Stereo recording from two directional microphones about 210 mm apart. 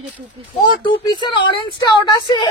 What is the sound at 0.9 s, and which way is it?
A woman's voice, 20° left (ahead or behind).